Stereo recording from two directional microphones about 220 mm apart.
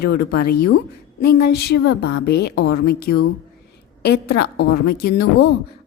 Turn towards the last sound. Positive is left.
turn(degrees=50)  # may be behind; listen again after turning